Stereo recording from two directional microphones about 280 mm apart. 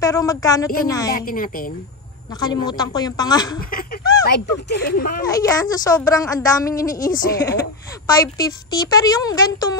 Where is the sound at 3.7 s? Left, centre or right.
Left.